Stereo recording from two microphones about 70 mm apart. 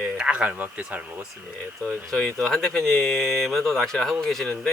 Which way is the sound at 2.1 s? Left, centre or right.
Centre.